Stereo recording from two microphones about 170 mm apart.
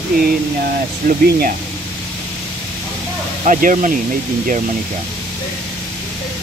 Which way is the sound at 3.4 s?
45° right (ahead or behind).